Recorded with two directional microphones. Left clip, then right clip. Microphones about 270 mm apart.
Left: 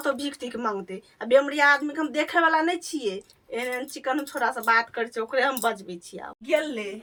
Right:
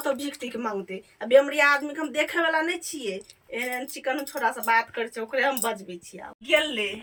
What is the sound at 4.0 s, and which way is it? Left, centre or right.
Speech, centre.